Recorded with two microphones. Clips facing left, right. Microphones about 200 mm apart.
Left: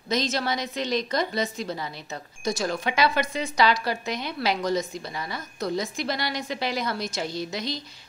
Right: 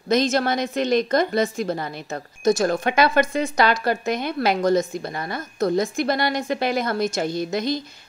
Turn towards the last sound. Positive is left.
turn(degrees=-50)  # may be behind; listen again after turning